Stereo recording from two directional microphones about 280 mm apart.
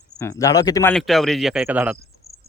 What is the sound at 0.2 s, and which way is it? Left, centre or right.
A man's voice, centre.